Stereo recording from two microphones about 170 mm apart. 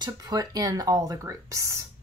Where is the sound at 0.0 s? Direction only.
20° right (ahead or behind).